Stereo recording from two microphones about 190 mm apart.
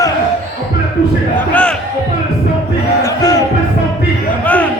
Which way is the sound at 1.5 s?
5° left (ahead or behind).